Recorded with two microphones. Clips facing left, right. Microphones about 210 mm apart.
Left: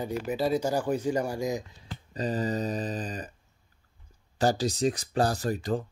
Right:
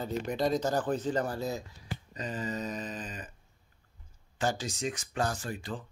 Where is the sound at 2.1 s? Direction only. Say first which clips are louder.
Left 7 dB; 35° left (ahead or behind).